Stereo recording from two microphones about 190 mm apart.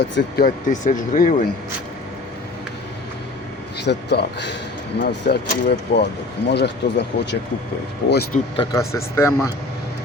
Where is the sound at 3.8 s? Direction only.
65° left (ahead or behind).